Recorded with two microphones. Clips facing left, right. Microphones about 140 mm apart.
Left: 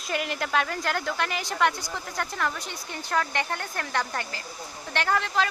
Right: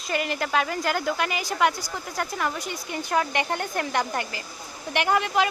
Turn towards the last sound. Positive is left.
turn(degrees=-15)  # may be behind; listen again after turning